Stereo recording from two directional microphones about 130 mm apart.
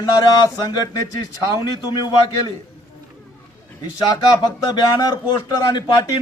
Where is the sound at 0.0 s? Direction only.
30° left (ahead or behind).